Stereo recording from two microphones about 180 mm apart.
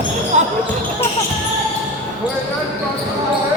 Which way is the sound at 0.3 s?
40° right (ahead or behind).